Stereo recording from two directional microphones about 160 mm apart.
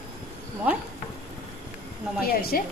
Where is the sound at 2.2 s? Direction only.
70° left (ahead or behind).